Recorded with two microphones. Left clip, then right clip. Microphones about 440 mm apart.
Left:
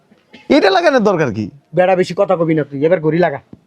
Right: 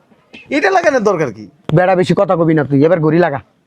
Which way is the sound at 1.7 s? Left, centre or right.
Right.